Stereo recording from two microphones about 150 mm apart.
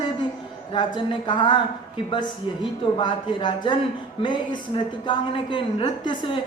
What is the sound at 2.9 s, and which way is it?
A woman's voice, 30° left (ahead or behind).